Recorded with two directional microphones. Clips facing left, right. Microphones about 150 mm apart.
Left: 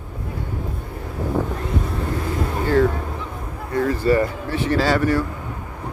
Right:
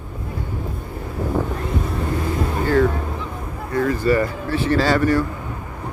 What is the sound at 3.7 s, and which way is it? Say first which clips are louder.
Speech: even; 25° left (ahead or behind).